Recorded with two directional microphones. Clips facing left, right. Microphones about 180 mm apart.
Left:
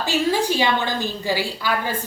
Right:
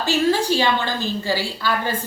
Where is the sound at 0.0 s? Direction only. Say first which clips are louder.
Right 2 dB; 15° left (ahead or behind).